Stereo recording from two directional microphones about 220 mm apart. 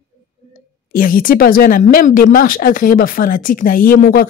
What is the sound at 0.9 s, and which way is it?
A woman's voice, 40° left (ahead or behind).